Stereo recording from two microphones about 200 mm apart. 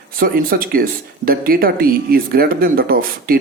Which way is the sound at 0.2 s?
45° right (ahead or behind).